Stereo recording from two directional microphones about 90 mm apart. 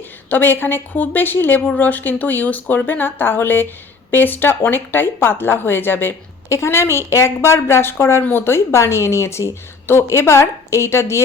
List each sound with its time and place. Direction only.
0.3 s speech: 20° left (ahead or behind)